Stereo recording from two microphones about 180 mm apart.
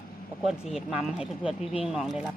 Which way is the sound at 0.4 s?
5° right (ahead or behind).